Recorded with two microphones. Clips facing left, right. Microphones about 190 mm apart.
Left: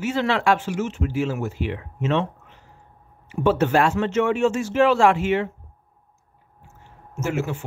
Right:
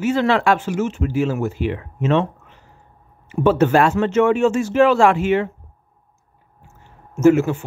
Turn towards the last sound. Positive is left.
turn(degrees=-50)  # may be behind; listen again after turning